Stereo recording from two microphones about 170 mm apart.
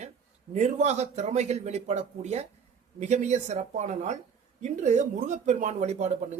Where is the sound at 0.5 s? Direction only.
45° right (ahead or behind).